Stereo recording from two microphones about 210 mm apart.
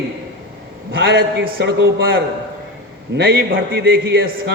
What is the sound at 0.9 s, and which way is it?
Speech, 60° right (ahead or behind).